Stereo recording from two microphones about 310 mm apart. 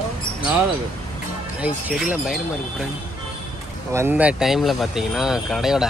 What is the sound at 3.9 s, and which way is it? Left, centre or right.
Speech, centre.